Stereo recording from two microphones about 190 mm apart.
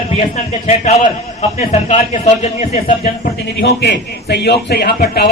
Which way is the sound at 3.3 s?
60° left (ahead or behind).